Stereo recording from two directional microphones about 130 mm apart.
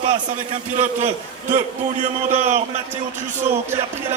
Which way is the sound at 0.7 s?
55° right (ahead or behind).